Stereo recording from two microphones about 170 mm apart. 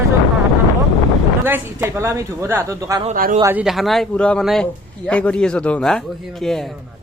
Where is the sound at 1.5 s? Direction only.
10° right (ahead or behind).